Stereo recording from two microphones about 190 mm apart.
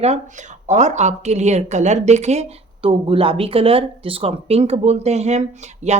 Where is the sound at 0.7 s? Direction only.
40° right (ahead or behind).